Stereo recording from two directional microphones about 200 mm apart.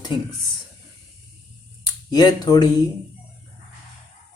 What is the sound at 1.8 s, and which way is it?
Speech, 20° left (ahead or behind).